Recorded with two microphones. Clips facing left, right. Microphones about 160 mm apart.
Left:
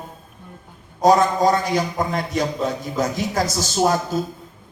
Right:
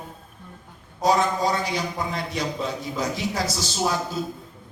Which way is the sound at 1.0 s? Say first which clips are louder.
Left 6 dB; 45° left (ahead or behind).